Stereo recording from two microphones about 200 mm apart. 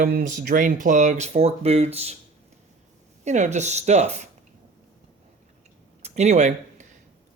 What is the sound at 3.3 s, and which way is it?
Speech, 35° right (ahead or behind).